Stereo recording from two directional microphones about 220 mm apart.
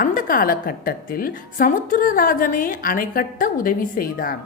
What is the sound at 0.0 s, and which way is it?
A woman's voice, 40° left (ahead or behind).